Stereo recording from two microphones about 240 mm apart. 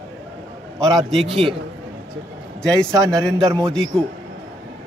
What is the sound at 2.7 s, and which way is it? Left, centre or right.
Speech, centre.